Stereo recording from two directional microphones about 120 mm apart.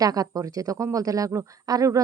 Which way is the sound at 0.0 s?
30° right (ahead or behind).